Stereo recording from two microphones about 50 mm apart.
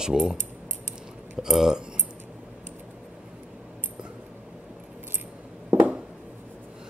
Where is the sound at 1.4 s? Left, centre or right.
Centre.